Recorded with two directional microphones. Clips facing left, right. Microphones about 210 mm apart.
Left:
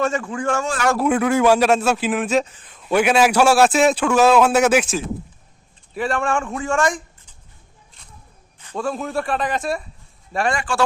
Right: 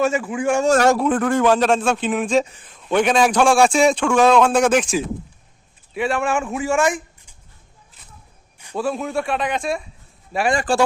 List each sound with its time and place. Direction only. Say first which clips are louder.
0.0 s speech: right 2 dB; 10° right (ahead or behind)
0.6 s a man's voice: right 9 dB; 40° right (ahead or behind)
0.9 s a man's voice: left 1 dB; 10° left (ahead or behind); by 7.0 s 5° right (ahead or behind)
8.5 s a man's voice: right 2 dB; 10° right (ahead or behind)
10.5 s a man's voice: right 5 dB; 35° right (ahead or behind)